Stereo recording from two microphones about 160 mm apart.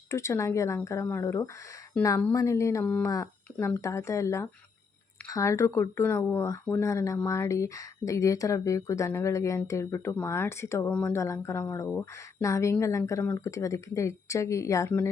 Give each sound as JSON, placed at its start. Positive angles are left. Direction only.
{"t": 0.1, "sound": "speech", "side_deg": 20}